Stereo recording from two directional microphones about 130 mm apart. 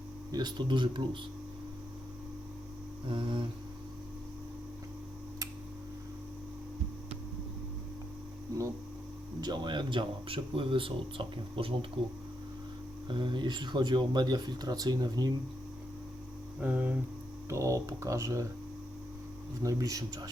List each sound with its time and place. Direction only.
0.3 s speech: 30° right (ahead or behind)
3.1 s speech: 40° right (ahead or behind)
9.4 s speech: 35° right (ahead or behind)
13.1 s speech: 40° right (ahead or behind)
16.6 s speech: 10° right (ahead or behind)
17.5 s speech: 25° right (ahead or behind)
19.6 s speech: 30° right (ahead or behind)